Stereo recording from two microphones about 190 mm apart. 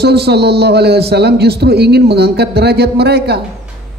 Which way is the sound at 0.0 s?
60° right (ahead or behind).